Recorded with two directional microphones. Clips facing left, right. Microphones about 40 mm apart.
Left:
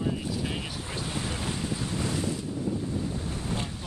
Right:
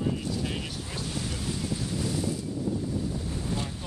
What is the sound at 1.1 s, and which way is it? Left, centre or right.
Boat, left.